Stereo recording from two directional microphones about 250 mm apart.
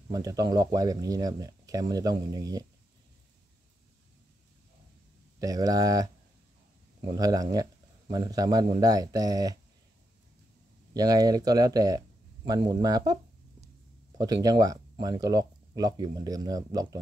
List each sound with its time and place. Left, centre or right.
0.1 s speech: centre
5.4 s speech: centre
7.2 s speech: centre
10.9 s speech: centre